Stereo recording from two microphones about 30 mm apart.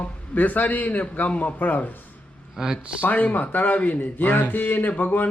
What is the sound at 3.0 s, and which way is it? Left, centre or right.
A man's voice, left.